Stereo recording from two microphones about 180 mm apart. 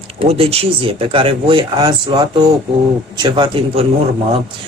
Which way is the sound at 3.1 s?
25° right (ahead or behind).